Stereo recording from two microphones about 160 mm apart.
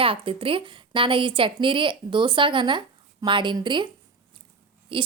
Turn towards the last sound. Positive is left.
turn(degrees=-35)  # may be behind; listen again after turning